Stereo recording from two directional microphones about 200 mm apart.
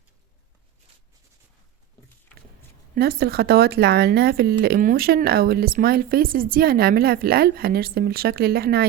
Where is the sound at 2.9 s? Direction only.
50° right (ahead or behind).